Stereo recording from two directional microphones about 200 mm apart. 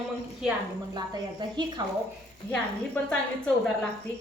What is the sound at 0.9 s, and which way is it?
Speech, 20° right (ahead or behind).